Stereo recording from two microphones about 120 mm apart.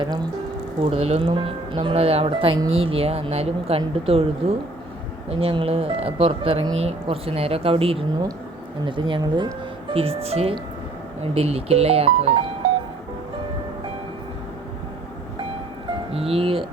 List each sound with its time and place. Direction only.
0.0 s speech: 35° right (ahead or behind)
0.8 s speech: 55° right (ahead or behind)
9.9 s speech: 55° right (ahead or behind)
16.1 s speech: 50° right (ahead or behind)